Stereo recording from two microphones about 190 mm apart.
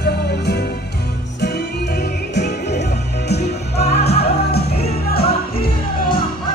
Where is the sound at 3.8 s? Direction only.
35° left (ahead or behind).